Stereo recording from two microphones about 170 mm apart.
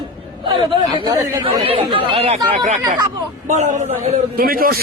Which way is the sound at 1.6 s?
35° right (ahead or behind).